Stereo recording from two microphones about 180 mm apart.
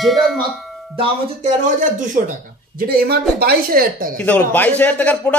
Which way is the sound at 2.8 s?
60° right (ahead or behind).